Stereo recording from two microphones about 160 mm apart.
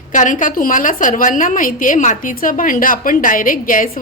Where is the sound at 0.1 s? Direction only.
55° left (ahead or behind).